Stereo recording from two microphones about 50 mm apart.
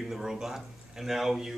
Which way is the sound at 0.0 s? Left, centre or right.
Centre.